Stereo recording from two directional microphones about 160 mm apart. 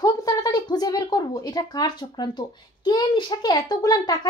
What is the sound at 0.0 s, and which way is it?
Speech, 25° left (ahead or behind).